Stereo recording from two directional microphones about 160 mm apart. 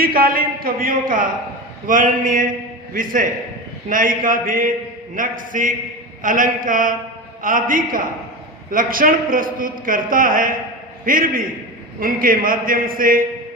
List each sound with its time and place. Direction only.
0.0 s a man's voice: 70° right (ahead or behind)